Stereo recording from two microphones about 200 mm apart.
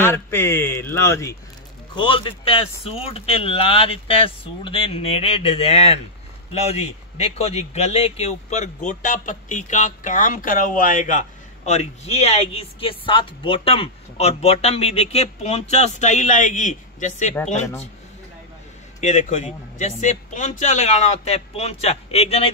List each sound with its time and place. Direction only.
0.0 s speech: 10° left (ahead or behind)
2.0 s speech: 25° left (ahead or behind)
18.9 s speech: 35° left (ahead or behind)